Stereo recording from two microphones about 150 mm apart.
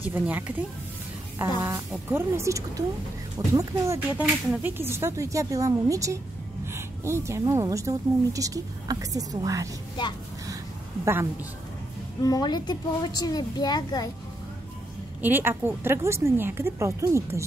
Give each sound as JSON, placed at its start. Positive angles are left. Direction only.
{"t": 0.0, "sound": "a woman's voice", "side_deg": -10}
{"t": 1.6, "sound": "speech", "side_deg": -20}
{"t": 10.0, "sound": "a woman's voice", "side_deg": 30}
{"t": 12.2, "sound": "a woman's voice", "side_deg": 25}
{"t": 15.2, "sound": "a woman's voice", "side_deg": -15}